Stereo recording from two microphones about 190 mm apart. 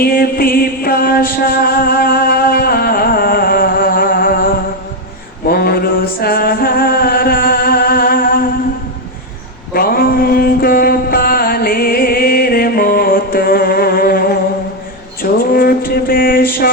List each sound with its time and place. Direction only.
0.0 s music: 50° left (ahead or behind)
5.5 s mantra: 55° left (ahead or behind)
9.7 s mantra: 50° left (ahead or behind)